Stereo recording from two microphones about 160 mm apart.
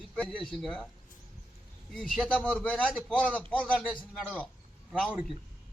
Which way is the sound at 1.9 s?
Centre (ahead or behind).